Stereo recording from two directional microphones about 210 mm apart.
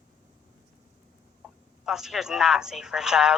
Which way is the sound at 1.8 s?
Centre (ahead or behind).